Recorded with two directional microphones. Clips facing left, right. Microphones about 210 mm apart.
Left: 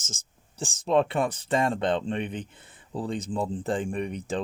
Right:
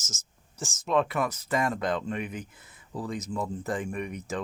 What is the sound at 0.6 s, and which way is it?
Speech, 30° left (ahead or behind).